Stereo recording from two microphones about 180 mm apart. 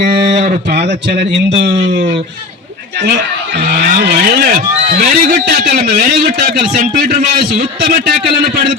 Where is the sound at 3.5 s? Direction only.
65° right (ahead or behind).